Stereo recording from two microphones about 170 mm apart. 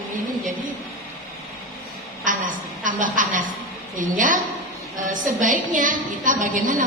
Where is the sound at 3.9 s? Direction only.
50° right (ahead or behind).